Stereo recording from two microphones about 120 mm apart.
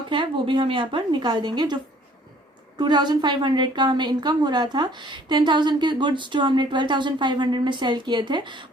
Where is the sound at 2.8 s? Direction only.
35° right (ahead or behind).